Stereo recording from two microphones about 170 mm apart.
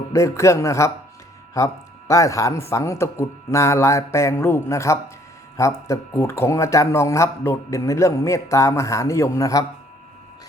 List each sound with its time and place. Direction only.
0.1 s speech: 20° left (ahead or behind)